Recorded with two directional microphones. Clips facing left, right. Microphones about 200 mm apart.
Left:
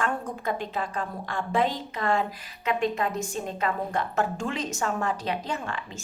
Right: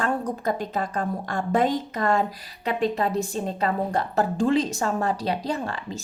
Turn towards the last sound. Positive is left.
turn(degrees=-35)  # may be behind; listen again after turning